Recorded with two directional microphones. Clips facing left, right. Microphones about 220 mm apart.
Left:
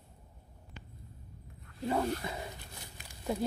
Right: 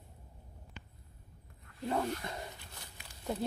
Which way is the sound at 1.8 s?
5° left (ahead or behind).